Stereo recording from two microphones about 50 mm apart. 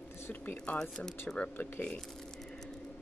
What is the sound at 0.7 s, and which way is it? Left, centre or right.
Speech, centre.